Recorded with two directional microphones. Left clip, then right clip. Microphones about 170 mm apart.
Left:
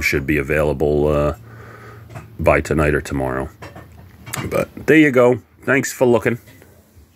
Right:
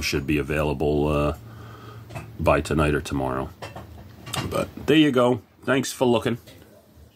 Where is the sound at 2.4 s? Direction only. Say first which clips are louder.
Left 5 dB; 20° left (ahead or behind).